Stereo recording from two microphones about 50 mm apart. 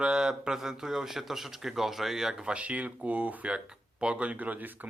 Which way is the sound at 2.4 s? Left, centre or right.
Right.